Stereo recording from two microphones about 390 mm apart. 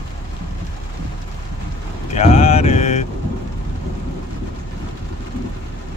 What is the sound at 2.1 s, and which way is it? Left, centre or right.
Mantra, centre.